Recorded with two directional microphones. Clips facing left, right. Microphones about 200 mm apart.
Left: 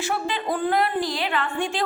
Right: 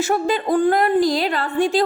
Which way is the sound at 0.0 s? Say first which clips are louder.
Right 7 dB; 45° right (ahead or behind).